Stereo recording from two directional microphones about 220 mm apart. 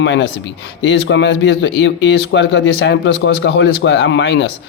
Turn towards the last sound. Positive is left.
turn(degrees=55)  # may be behind; listen again after turning